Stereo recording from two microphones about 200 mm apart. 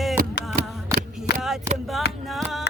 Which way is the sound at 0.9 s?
55° left (ahead or behind).